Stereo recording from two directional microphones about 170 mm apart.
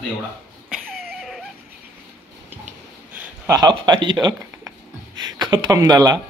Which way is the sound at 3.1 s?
10° right (ahead or behind).